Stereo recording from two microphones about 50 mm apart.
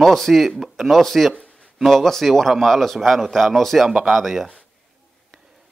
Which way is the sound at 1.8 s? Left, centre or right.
Centre.